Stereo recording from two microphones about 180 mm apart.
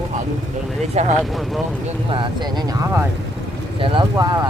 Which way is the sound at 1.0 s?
35° right (ahead or behind).